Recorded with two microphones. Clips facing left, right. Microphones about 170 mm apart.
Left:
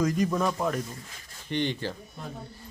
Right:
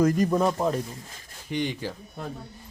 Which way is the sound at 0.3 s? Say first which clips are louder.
Right 4 dB; 30° right (ahead or behind).